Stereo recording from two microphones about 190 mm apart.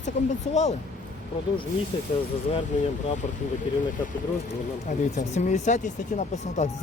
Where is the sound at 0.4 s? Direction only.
35° left (ahead or behind).